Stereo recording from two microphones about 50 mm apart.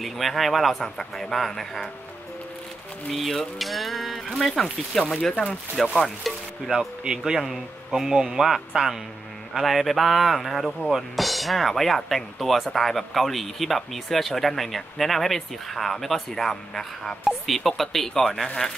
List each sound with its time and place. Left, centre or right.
0.0 s speech: centre
3.1 s speech: centre
5.3 s speech: left
5.8 s speech: centre
6.7 s speech: centre